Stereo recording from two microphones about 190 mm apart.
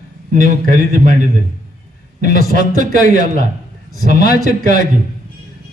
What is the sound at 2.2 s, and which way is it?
A man's voice, 45° right (ahead or behind).